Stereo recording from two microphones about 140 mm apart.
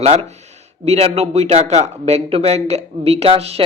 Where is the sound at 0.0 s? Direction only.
50° right (ahead or behind).